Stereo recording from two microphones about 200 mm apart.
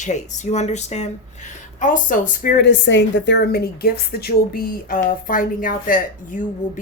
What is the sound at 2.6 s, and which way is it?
A woman's voice, 65° left (ahead or behind).